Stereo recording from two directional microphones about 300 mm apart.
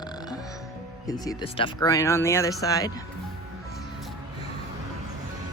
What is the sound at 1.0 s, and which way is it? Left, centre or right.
Speech, centre.